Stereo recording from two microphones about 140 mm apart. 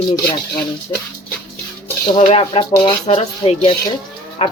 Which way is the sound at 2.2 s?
40° left (ahead or behind).